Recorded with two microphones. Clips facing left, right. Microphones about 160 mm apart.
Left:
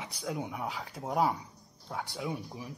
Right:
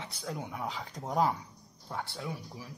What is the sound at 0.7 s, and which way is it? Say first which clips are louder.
Speech: even; centre (ahead or behind).